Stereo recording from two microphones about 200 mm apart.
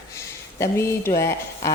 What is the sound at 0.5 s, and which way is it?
A woman's voice, 15° left (ahead or behind).